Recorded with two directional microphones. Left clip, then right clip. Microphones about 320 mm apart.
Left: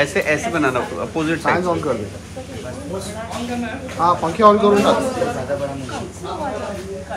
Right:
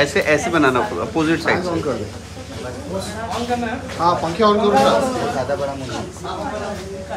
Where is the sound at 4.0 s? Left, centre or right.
Centre.